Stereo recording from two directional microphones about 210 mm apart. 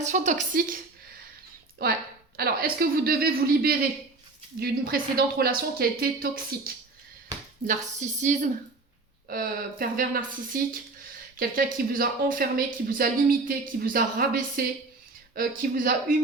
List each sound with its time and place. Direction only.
0.0 s a woman's voice: 35° right (ahead or behind)
1.8 s a woman's voice: 45° right (ahead or behind)